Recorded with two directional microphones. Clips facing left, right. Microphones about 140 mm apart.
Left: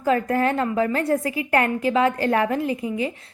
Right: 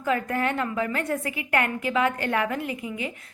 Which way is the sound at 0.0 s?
35° left (ahead or behind).